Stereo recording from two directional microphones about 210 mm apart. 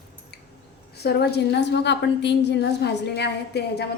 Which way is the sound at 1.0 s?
50° left (ahead or behind).